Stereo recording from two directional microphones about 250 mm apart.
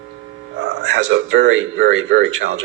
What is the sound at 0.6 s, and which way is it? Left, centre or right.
Speech, right.